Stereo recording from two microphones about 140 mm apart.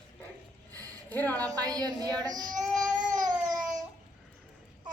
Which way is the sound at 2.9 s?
70° right (ahead or behind).